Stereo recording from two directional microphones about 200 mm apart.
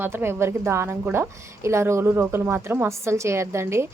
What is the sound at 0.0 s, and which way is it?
Speech, 10° right (ahead or behind).